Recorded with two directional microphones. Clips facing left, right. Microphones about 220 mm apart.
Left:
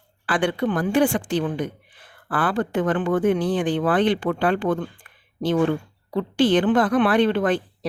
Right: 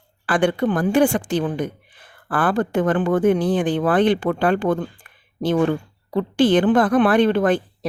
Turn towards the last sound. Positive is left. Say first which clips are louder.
# right 3 dB
turn(degrees=-45)  # may be behind; listen again after turning